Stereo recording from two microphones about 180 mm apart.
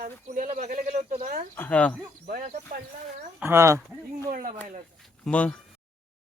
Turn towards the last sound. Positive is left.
turn(degrees=5)  # may be behind; listen again after turning